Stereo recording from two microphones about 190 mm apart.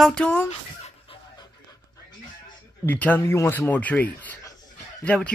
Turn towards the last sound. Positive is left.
turn(degrees=5)  # may be behind; listen again after turning